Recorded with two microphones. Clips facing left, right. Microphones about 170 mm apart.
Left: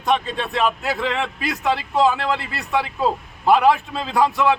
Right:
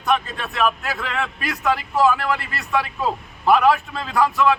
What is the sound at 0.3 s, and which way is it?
A man's voice, 25° left (ahead or behind).